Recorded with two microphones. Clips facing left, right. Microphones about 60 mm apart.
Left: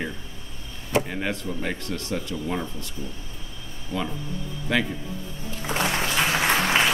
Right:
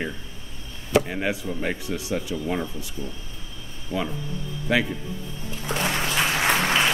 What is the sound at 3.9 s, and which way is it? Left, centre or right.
Speech, centre.